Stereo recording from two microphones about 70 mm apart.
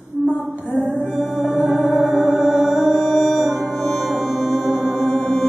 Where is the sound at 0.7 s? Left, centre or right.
Centre.